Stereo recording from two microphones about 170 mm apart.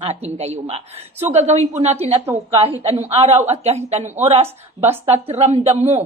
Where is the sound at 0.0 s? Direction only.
40° right (ahead or behind).